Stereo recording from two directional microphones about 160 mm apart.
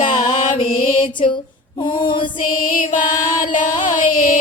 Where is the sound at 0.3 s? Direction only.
35° left (ahead or behind).